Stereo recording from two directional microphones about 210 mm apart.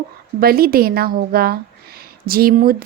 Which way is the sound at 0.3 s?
45° right (ahead or behind).